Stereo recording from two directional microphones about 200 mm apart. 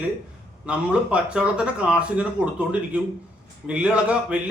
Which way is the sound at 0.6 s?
5° right (ahead or behind).